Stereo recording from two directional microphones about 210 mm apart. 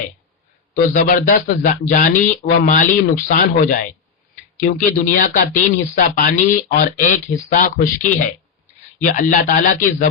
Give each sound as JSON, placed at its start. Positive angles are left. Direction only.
{"t": 0.7, "sound": "speech", "side_deg": 40}